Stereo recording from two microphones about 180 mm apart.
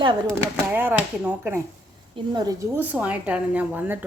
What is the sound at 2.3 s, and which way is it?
Speech, 20° right (ahead or behind).